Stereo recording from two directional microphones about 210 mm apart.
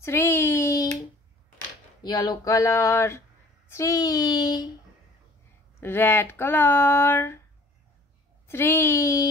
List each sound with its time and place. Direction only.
0.0 s a sound: 10° left (ahead or behind)
2.0 s speech: 20° left (ahead or behind)
5.8 s speech: 10° left (ahead or behind)
8.5 s speech: 10° left (ahead or behind)